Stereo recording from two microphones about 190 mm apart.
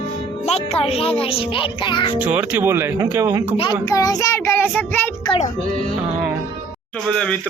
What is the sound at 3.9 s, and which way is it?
Speech, 20° left (ahead or behind).